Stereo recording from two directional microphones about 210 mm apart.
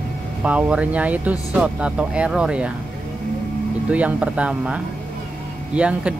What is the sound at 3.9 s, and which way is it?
Speech, 5° right (ahead or behind).